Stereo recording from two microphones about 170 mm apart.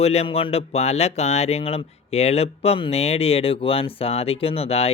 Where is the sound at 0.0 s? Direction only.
35° left (ahead or behind).